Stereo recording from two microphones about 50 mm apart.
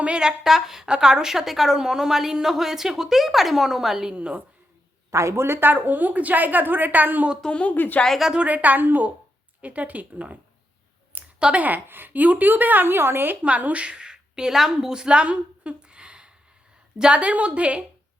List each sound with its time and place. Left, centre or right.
0.0 s a woman's voice: centre
4.1 s a woman's voice: right
5.1 s speech: right
5.6 s a woman's voice: right
7.4 s a woman's voice: left
8.4 s a woman's voice: right
11.3 s speech: centre
11.6 s a woman's voice: right
13.4 s a woman's voice: right
13.9 s a woman's voice: centre